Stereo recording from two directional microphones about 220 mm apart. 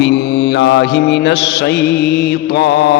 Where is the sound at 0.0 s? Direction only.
50° left (ahead or behind).